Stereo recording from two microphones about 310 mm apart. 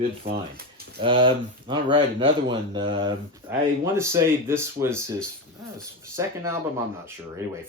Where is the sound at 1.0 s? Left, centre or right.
Centre.